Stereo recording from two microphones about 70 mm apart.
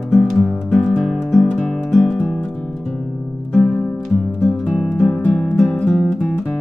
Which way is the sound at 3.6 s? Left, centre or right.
Centre.